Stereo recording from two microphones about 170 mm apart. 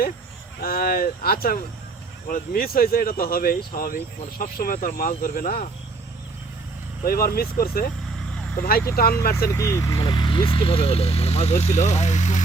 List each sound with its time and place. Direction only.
0.6 s speech: 60° left (ahead or behind)
7.0 s speech: 60° left (ahead or behind)
9.0 s speech: 60° left (ahead or behind)
9.5 s speech: 15° left (ahead or behind); by 12.4 s 45° left (ahead or behind)